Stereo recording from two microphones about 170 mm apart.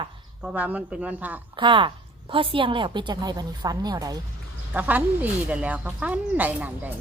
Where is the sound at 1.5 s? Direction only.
30° right (ahead or behind).